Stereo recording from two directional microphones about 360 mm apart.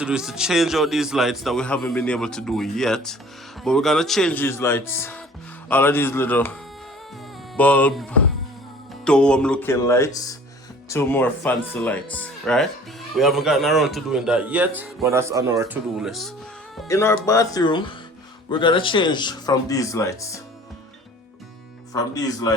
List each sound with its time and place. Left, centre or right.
0.0 s a man's voice: centre
9.0 s a man's voice: centre
21.9 s speech: centre